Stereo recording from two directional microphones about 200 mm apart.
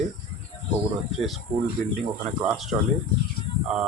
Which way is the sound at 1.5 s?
25° right (ahead or behind).